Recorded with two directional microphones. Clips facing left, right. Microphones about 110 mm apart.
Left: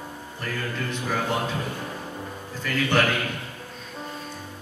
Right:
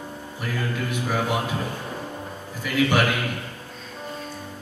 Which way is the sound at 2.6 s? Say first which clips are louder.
Right 2 dB; 10° right (ahead or behind).